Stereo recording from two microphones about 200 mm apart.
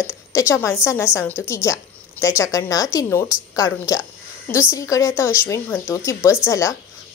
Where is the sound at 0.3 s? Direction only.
15° left (ahead or behind).